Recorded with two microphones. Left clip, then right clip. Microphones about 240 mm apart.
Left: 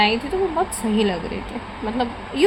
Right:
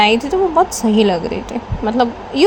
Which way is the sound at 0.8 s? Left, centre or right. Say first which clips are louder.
Right 7 dB; right.